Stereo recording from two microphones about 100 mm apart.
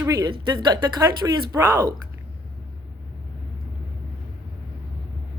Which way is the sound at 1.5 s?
25° right (ahead or behind).